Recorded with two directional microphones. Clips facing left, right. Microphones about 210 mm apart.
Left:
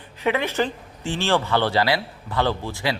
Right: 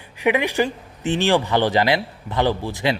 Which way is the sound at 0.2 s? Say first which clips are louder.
Right 3 dB; 15° right (ahead or behind).